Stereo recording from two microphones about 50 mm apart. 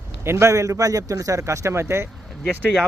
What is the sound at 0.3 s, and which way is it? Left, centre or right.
A man's voice, right.